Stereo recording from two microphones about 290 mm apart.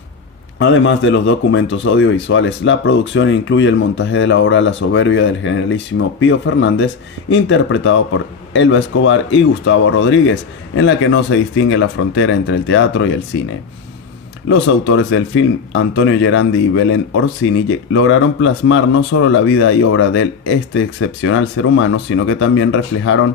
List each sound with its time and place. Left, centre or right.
0.6 s speech: left
14.5 s speech: left